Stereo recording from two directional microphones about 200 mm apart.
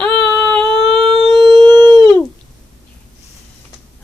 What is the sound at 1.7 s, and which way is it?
Dog, 20° right (ahead or behind).